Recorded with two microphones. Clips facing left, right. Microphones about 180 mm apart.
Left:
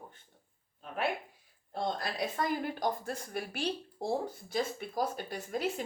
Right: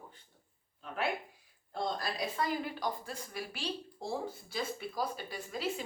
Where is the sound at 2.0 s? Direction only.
55° left (ahead or behind).